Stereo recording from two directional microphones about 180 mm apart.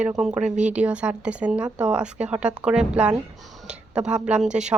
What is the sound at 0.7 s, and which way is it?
Speech, 5° right (ahead or behind).